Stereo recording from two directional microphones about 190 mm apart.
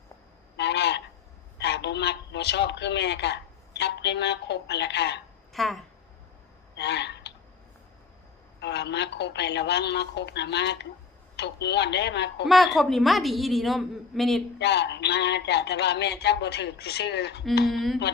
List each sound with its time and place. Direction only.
0.5 s a sound: 65° left (ahead or behind)
1.5 s a man's voice: 65° left (ahead or behind)
5.5 s a woman's voice: centre (ahead or behind)
6.7 s a sound: 65° left (ahead or behind)
8.6 s speech: 65° left (ahead or behind)
12.5 s a woman's voice: centre (ahead or behind)
14.6 s speech: 60° left (ahead or behind)
17.7 s a woman's voice: centre (ahead or behind)